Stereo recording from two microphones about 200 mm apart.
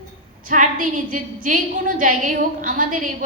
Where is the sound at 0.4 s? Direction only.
40° right (ahead or behind).